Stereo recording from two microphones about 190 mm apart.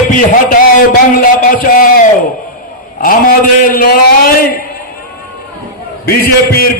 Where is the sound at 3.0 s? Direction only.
50° left (ahead or behind).